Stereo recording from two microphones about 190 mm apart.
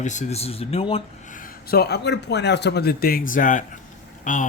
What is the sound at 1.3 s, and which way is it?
A man's voice, 50° left (ahead or behind).